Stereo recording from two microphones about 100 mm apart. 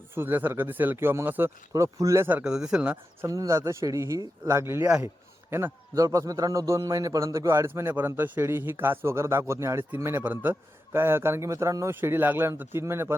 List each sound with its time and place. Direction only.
0.1 s a man's voice: 20° right (ahead or behind)
1.7 s a man's voice: 35° right (ahead or behind)
2.4 s speech: 5° right (ahead or behind)
3.2 s a man's voice: 35° right (ahead or behind)
7.7 s a man's voice: 20° right (ahead or behind)